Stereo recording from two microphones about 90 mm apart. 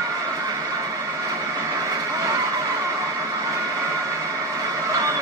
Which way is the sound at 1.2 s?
40° right (ahead or behind).